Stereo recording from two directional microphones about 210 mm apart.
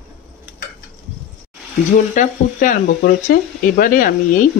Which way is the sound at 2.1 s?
40° left (ahead or behind).